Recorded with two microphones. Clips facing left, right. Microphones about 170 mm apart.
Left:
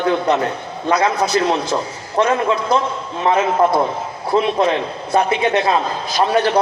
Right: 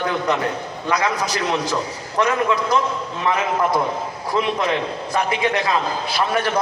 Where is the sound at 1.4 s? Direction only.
30° left (ahead or behind).